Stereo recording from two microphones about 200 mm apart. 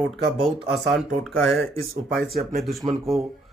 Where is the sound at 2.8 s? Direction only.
25° right (ahead or behind).